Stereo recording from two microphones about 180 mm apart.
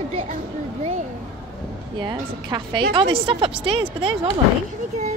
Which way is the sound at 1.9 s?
25° right (ahead or behind).